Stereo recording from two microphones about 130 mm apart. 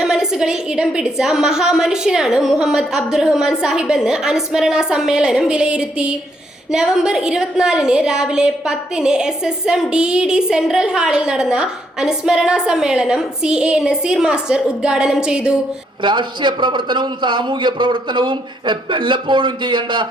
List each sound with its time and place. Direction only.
0.0 s a woman's voice: 5° right (ahead or behind)
16.0 s a man's voice: 35° right (ahead or behind)